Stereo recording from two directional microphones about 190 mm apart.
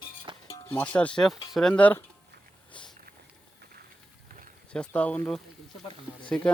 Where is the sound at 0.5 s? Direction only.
10° left (ahead or behind).